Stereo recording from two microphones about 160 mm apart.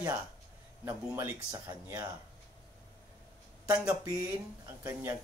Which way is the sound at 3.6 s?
20° right (ahead or behind).